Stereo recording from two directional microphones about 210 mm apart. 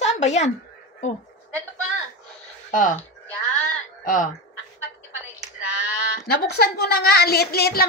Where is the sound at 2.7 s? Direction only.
35° left (ahead or behind).